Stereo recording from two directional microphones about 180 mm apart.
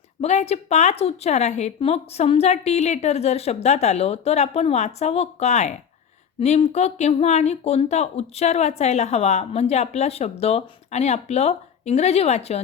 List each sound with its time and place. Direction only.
0.2 s speech: 40° left (ahead or behind)